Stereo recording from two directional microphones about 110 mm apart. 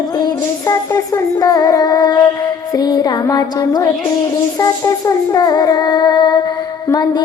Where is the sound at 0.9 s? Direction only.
35° left (ahead or behind).